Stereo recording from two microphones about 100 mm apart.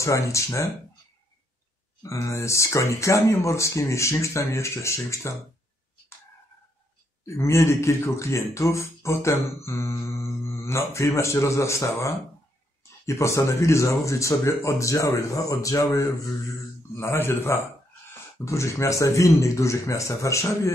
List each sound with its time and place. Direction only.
0.0 s speech: 30° left (ahead or behind)
2.0 s music: 30° left (ahead or behind)
7.2 s music: 30° left (ahead or behind)
13.0 s speech: 30° left (ahead or behind)
17.0 s music: 25° left (ahead or behind)
18.4 s speech: 30° left (ahead or behind)